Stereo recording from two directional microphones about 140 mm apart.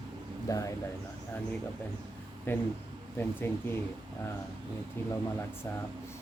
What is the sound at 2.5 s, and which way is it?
Speech, 15° left (ahead or behind).